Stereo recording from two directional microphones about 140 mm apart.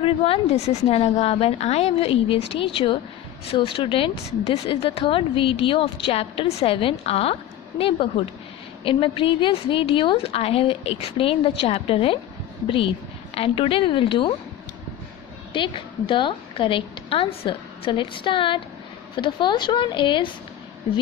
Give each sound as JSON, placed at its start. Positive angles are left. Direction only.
{"t": 0.0, "sound": "a woman's voice", "side_deg": 40}
{"t": 8.8, "sound": "a woman's voice", "side_deg": 35}
{"t": 15.5, "sound": "a woman's voice", "side_deg": 35}